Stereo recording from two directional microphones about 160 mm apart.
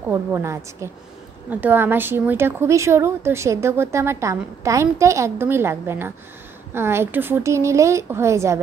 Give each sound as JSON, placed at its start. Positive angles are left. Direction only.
{"t": 0.1, "sound": "a woman's voice", "side_deg": -15}